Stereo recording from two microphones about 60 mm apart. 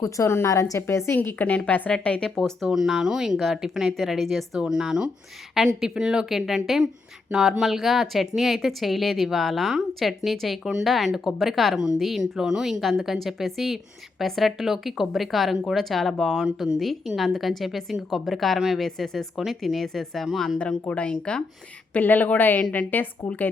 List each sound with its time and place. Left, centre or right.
0.0 s a woman's voice: left
0.8 s a woman's voice: left
1.2 s a woman's voice: left
2.4 s a woman's voice: centre
4.6 s a woman's voice: centre
20.8 s a woman's voice: left
21.9 s a woman's voice: left